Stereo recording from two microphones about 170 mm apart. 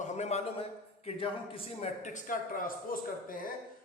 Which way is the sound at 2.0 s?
45° left (ahead or behind).